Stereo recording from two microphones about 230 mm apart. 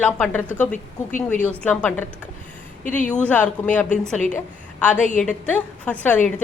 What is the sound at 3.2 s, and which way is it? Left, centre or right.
A woman's voice, centre.